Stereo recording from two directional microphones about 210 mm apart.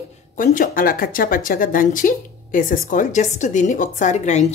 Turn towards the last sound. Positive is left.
turn(degrees=35)  # may be behind; listen again after turning